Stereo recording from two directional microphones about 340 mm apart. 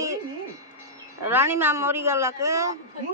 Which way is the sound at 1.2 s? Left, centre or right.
Centre.